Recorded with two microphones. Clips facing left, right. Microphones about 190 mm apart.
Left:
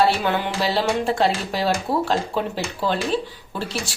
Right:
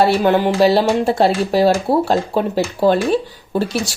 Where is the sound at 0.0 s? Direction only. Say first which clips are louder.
Right 6 dB; 40° right (ahead or behind).